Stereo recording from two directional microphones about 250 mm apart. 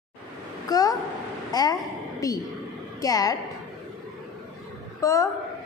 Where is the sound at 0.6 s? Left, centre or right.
Centre.